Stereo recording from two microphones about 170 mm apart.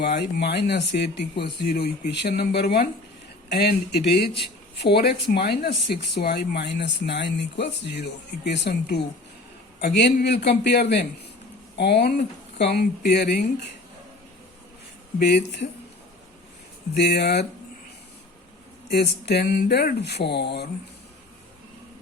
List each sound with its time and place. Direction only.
0.2 s speech: 80° left
5.7 s speech: 80° left
15.2 s speech: 85° left
16.9 s speech: 80° left
18.9 s speech: 75° left (ahead or behind)